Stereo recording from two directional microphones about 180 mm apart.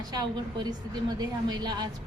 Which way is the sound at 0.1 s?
20° right (ahead or behind).